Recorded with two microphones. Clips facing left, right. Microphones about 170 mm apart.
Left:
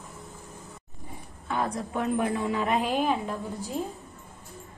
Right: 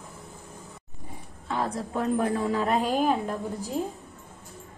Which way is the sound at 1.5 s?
30° right (ahead or behind).